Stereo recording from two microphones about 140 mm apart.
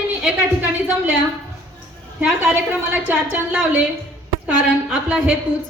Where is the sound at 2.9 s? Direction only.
10° right (ahead or behind).